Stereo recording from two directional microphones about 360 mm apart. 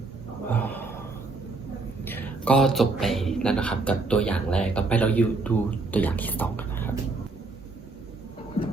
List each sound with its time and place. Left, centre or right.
0.5 s gasp: centre
2.0 s a man's voice: centre